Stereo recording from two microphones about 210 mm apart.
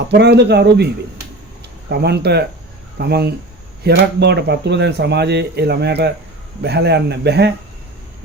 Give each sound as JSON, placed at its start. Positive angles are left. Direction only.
{"t": 0.1, "sound": "speech", "side_deg": -55}
{"t": 1.9, "sound": "speech", "side_deg": -50}